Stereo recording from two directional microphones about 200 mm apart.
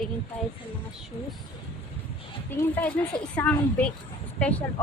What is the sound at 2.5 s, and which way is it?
A woman's voice, 10° left (ahead or behind).